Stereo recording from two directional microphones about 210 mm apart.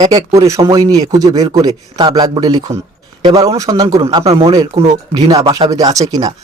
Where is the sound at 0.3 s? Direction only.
15° right (ahead or behind).